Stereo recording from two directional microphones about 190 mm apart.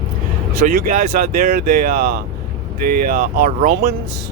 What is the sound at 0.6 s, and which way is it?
Speech, 50° right (ahead or behind).